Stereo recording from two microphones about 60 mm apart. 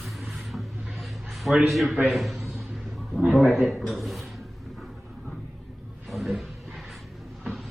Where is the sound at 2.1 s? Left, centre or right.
Centre.